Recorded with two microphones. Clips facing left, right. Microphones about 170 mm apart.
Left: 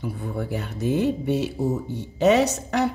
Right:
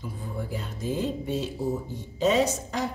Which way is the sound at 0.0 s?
65° left (ahead or behind).